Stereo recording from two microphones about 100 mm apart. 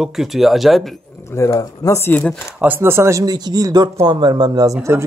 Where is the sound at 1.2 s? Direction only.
30° left (ahead or behind).